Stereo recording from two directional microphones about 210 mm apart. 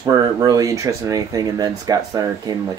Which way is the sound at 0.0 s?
15° right (ahead or behind).